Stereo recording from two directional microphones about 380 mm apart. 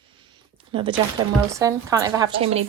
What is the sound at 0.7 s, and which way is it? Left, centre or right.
Speech, centre.